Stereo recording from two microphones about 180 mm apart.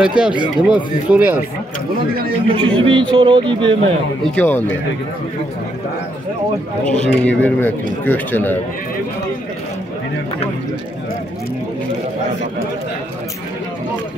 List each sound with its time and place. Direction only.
0.0 s speech: 5° right (ahead or behind)
2.5 s speech: 30° right (ahead or behind)
4.2 s speech: 10° left (ahead or behind)
7.0 s speech: 10° left (ahead or behind)